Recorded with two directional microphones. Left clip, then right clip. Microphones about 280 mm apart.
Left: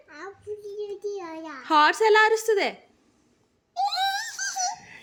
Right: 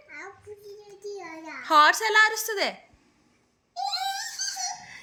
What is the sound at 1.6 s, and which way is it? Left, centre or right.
A woman's voice, centre.